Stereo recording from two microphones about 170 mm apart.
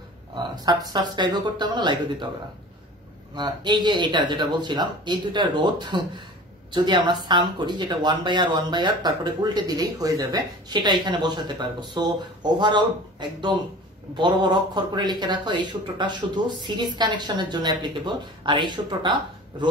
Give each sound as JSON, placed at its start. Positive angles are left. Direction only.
{"t": 0.4, "sound": "speech", "side_deg": -25}
{"t": 3.3, "sound": "speech", "side_deg": -25}